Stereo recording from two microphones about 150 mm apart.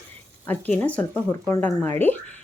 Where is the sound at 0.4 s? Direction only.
10° left (ahead or behind).